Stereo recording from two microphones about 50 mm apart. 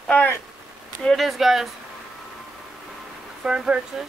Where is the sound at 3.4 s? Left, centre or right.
Centre.